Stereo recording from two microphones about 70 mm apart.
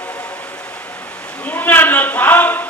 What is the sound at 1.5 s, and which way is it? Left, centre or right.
A man's voice, left.